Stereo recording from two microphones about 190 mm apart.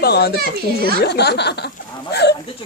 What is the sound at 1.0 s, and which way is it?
Speech, 60° left (ahead or behind).